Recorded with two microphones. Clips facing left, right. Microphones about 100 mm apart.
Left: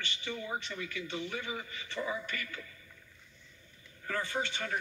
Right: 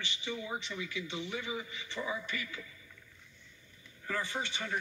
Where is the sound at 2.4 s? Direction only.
55° left (ahead or behind).